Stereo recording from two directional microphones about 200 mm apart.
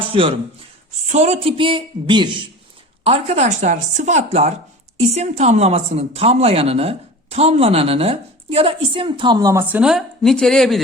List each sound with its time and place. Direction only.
0.0 s speech: 25° right (ahead or behind); by 10.8 s centre (ahead or behind)